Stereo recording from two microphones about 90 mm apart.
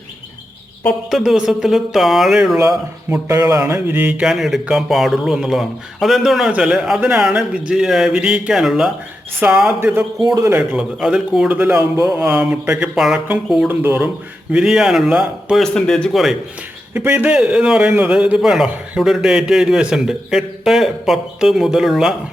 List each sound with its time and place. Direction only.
1.1 s a man's voice: centre (ahead or behind)
2.6 s speech: 35° right (ahead or behind)
3.6 s mantra: 20° right (ahead or behind)
4.3 s a man's voice: centre (ahead or behind)
10.2 s speech: 40° right (ahead or behind)
11.0 s a man's voice: 10° right (ahead or behind)
13.7 s mantra: 20° right (ahead or behind)
14.5 s a man's voice: 5° right (ahead or behind)
15.5 s a man's voice: 5° left (ahead or behind)
16.9 s mantra: 20° right (ahead or behind)
17.3 s a man's voice: 10° right (ahead or behind)